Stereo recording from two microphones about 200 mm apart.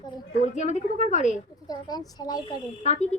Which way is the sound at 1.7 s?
20° left (ahead or behind).